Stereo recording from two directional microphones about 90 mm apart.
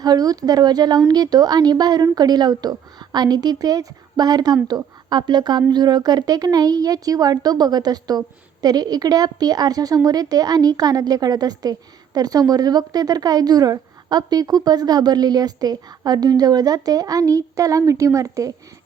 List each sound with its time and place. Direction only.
0.0 s a woman's voice: 45° right (ahead or behind)